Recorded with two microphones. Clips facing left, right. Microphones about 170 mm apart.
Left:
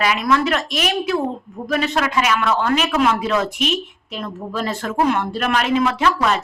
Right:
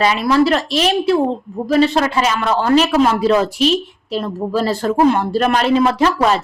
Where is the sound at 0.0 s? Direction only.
30° right (ahead or behind).